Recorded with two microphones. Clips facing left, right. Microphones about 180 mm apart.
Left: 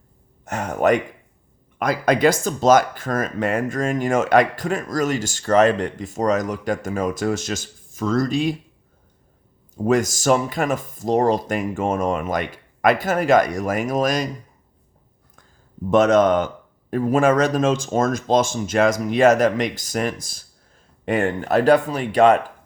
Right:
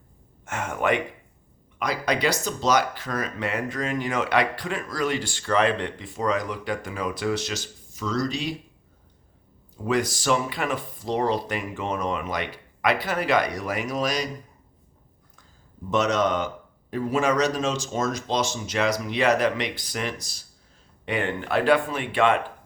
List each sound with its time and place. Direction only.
0.4 s speech: 40° left (ahead or behind)
9.8 s speech: 45° left (ahead or behind)
15.9 s speech: 50° left (ahead or behind)